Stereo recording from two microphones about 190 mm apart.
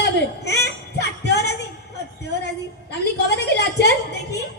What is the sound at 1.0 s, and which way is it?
Music, 60° left (ahead or behind).